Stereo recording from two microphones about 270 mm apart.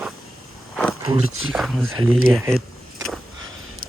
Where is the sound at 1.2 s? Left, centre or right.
Right.